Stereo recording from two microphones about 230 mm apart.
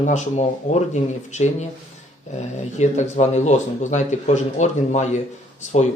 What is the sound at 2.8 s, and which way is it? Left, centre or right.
Speech, left.